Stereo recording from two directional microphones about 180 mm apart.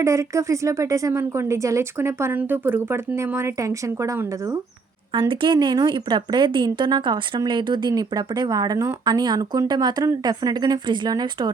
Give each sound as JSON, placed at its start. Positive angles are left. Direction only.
{"t": 0.0, "sound": "a woman's voice", "side_deg": -15}
{"t": 5.1, "sound": "speech", "side_deg": -30}